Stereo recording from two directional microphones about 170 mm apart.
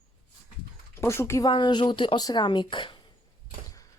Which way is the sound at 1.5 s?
25° left (ahead or behind).